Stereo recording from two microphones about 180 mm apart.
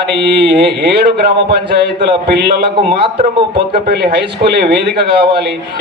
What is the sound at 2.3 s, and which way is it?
Speech, 65° right (ahead or behind).